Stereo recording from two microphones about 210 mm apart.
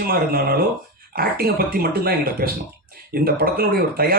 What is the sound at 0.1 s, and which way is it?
Speech, 45° right (ahead or behind).